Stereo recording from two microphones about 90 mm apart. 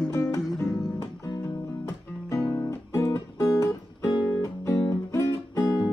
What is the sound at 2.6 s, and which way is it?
Music, 30° left (ahead or behind).